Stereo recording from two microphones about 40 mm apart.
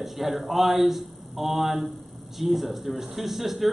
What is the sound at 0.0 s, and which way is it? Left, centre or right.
A man's voice, centre.